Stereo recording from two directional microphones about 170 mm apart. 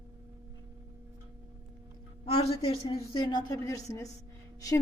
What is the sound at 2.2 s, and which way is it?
A woman's voice, 35° left (ahead or behind).